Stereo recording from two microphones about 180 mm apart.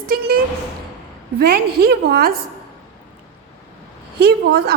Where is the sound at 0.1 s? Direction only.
55° right (ahead or behind).